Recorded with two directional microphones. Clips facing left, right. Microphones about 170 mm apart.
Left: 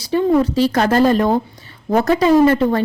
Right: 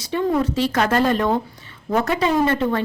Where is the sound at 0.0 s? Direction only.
35° left (ahead or behind).